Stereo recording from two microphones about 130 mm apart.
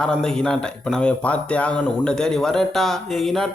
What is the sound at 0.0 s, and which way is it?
A man's voice, 5° left (ahead or behind).